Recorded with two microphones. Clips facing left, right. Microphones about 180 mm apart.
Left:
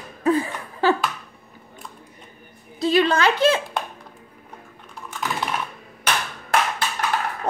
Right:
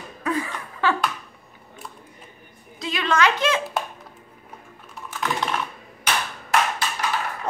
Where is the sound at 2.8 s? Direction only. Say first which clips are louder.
Left 4 dB; 35° left (ahead or behind).